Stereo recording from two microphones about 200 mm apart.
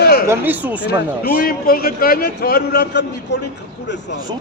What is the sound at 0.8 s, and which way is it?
A man's voice, 50° left (ahead or behind).